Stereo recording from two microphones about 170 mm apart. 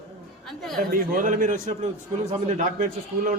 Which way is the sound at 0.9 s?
50° right (ahead or behind).